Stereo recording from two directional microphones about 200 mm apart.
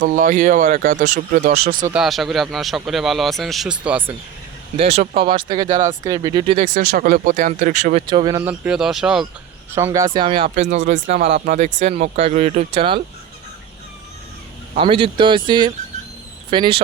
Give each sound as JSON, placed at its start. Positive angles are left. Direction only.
{"t": 0.0, "sound": "speech", "side_deg": -40}
{"t": 1.9, "sound": "speech", "side_deg": 0}
{"t": 4.8, "sound": "speech", "side_deg": -30}
{"t": 6.6, "sound": "speech", "side_deg": -45}
{"t": 8.0, "sound": "speech", "side_deg": -20}
{"t": 8.4, "sound": "speech", "side_deg": -10}
{"t": 9.7, "sound": "speech", "side_deg": -15}
{"t": 14.8, "sound": "speech", "side_deg": -25}